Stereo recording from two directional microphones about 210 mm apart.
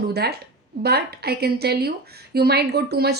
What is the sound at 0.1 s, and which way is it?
A woman's voice, 50° right (ahead or behind).